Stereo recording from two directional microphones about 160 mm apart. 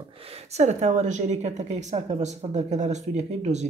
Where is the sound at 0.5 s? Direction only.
45° right (ahead or behind).